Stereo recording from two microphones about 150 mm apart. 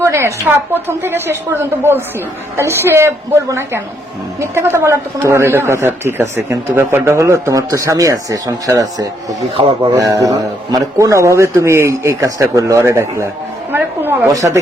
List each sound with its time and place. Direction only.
0.0 s a woman's voice: 20° right (ahead or behind)
9.6 s speech: 35° right (ahead or behind)
9.9 s speech: 20° right (ahead or behind)
13.7 s a sound: 15° right (ahead or behind)
14.3 s speech: 20° right (ahead or behind)